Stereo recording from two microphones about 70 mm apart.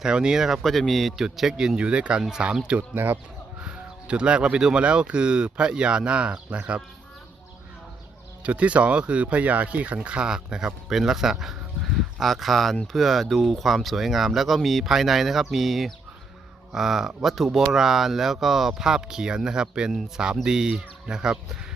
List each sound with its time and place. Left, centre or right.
0.0 s speech: centre
2.9 s speech: right
3.6 s speech: centre
8.4 s speech: centre